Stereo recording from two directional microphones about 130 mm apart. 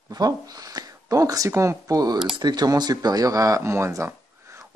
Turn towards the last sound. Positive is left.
turn(degrees=-20)  # may be behind; listen again after turning